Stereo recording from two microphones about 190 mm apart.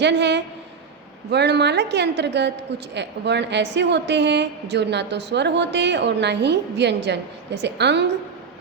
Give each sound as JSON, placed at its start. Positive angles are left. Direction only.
{"t": 0.0, "sound": "a woman's voice", "side_deg": -65}